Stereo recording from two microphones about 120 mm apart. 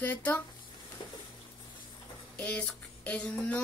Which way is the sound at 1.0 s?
40° left (ahead or behind).